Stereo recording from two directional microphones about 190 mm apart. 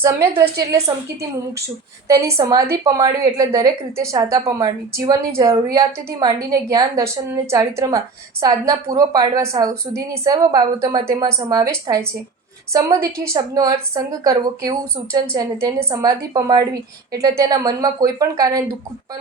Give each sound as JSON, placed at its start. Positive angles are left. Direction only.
{"t": 0.0, "sound": "a woman's voice", "side_deg": -15}
{"t": 2.0, "sound": "a woman's voice", "side_deg": -15}